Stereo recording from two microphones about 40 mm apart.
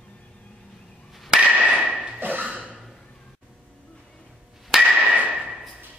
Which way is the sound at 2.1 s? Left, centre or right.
Right.